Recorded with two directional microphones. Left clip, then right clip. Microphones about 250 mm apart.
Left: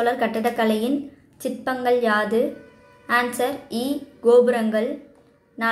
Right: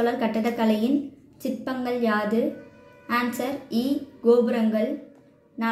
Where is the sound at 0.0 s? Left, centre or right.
Left.